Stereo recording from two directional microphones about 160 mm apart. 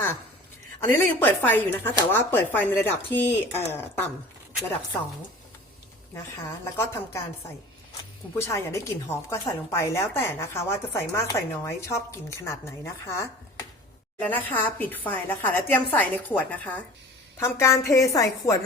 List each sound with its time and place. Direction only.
0.9 s a woman's voice: 15° left (ahead or behind)
6.7 s a woman's voice: 15° left (ahead or behind)
8.4 s a woman's voice: 15° left (ahead or behind)
14.3 s a woman's voice: 10° left (ahead or behind)